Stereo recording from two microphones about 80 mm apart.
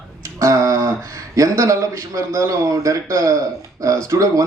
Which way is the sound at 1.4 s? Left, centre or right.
Right.